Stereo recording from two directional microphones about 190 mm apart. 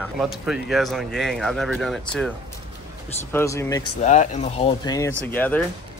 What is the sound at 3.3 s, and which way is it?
Speech, 15° left (ahead or behind).